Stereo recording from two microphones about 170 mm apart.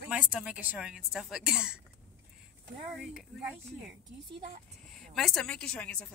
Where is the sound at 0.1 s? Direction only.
5° right (ahead or behind).